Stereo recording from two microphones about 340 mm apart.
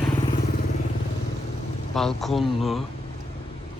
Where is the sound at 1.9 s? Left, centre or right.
Centre.